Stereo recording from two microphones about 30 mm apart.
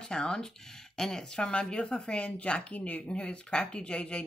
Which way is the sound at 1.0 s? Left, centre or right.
Centre.